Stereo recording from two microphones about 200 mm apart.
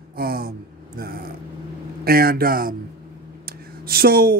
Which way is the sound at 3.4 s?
50° right (ahead or behind).